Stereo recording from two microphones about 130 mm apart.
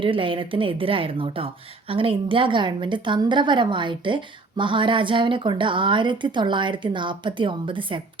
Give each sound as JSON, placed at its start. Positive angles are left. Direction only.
{"t": 0.0, "sound": "a woman's voice", "side_deg": -40}